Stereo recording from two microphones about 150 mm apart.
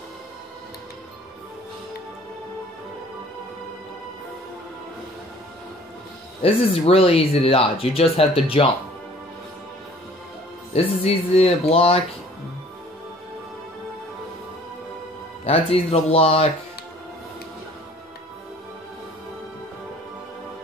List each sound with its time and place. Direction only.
6.4 s speech: 40° left (ahead or behind)
10.7 s speech: 40° left (ahead or behind)
15.4 s speech: 40° left (ahead or behind)